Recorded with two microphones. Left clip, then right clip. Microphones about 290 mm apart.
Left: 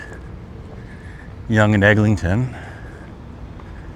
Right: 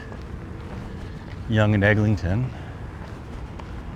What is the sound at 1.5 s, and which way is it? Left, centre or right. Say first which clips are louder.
Speech: left 6 dB; centre.